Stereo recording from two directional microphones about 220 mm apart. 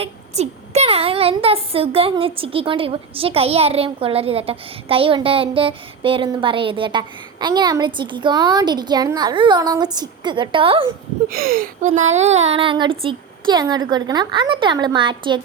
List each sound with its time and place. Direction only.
0.0 s a woman's voice: 30° right (ahead or behind)
11.3 s a woman's voice: 40° right (ahead or behind); by 15.4 s 20° right (ahead or behind)